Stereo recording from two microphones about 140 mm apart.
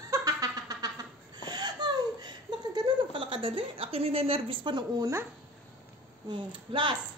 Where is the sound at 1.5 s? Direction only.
30° right (ahead or behind).